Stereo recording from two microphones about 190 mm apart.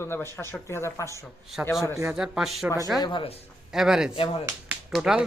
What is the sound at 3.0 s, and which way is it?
Speech, 25° left (ahead or behind).